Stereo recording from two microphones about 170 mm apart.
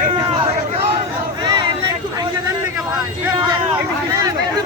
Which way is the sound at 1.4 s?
25° right (ahead or behind).